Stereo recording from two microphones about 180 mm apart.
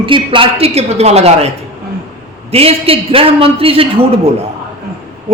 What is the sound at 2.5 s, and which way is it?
A man's voice, 35° right (ahead or behind).